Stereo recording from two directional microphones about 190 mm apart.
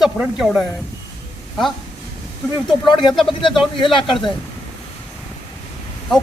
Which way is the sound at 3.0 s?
Centre (ahead or behind).